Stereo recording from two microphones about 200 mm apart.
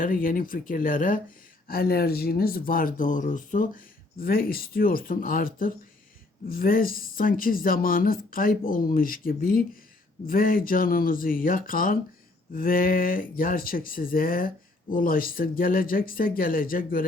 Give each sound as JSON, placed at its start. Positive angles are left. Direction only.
{"t": 0.0, "sound": "speech", "side_deg": 45}